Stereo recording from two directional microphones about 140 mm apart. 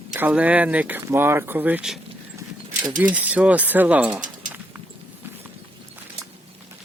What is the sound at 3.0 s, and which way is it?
Speech, 10° right (ahead or behind).